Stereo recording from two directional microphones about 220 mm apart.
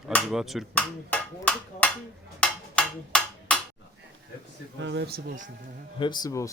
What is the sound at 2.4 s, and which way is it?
Percussion, 5° left (ahead or behind).